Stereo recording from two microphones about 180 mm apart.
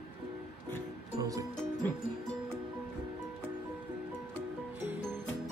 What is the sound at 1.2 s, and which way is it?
Music, 20° right (ahead or behind).